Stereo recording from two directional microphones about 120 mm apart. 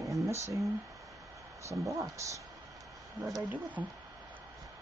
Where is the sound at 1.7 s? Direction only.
25° right (ahead or behind).